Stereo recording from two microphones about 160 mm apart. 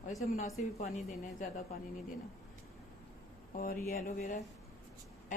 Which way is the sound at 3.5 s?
65° left (ahead or behind).